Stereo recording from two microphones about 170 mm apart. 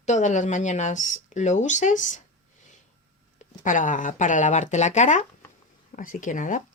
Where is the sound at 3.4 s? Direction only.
50° left (ahead or behind).